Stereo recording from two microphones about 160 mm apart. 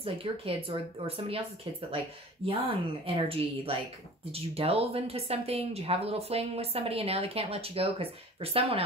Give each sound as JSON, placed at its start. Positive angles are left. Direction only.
{"t": 0.0, "sound": "speech", "side_deg": -35}
{"t": 2.4, "sound": "speech", "side_deg": -35}